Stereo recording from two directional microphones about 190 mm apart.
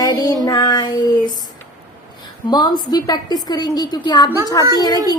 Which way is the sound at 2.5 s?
20° left (ahead or behind).